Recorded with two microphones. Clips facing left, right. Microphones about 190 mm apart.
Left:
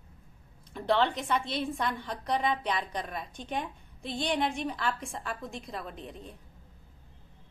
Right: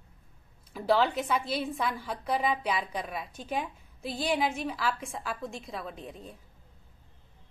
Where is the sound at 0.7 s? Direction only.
5° right (ahead or behind).